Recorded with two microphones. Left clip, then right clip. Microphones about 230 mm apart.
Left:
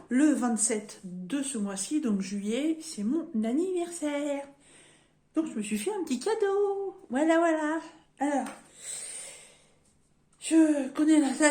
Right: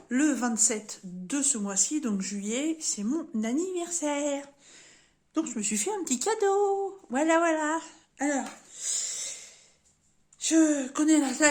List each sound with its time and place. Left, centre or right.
0.1 s a woman's voice: right
10.4 s a woman's voice: right